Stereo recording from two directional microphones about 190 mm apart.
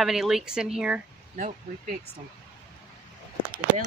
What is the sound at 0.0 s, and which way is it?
A woman's voice, centre (ahead or behind).